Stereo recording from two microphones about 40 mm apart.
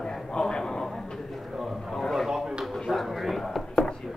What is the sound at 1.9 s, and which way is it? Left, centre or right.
Speech, centre.